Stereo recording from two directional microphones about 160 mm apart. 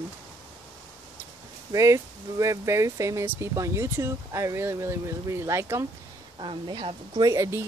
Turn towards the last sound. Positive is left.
turn(degrees=-15)  # may be behind; listen again after turning